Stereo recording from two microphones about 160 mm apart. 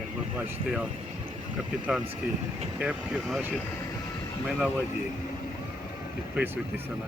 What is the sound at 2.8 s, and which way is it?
Speech, 5° right (ahead or behind).